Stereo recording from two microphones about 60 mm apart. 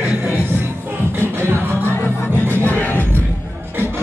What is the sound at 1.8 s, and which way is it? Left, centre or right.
Music, left.